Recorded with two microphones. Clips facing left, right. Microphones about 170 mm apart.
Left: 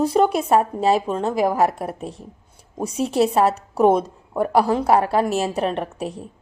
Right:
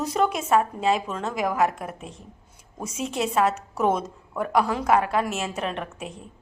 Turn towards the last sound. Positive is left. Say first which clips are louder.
# left 7 dB
turn(degrees=40)  # may be behind; listen again after turning